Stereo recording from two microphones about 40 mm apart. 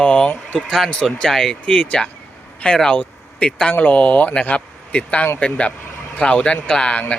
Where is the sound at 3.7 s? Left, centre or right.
Left.